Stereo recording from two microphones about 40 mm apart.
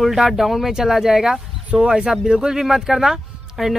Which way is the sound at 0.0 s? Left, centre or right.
Centre.